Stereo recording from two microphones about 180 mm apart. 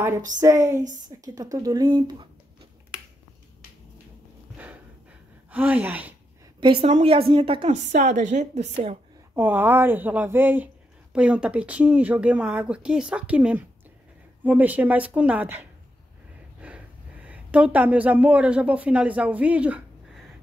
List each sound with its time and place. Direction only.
0.4 s speech: 15° right (ahead or behind)
5.5 s speech: 10° right (ahead or behind)
6.8 s a woman's voice: 35° right (ahead or behind)
9.3 s speech: 10° right (ahead or behind)